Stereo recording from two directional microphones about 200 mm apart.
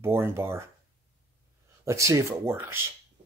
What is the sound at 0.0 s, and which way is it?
Speech, 10° right (ahead or behind).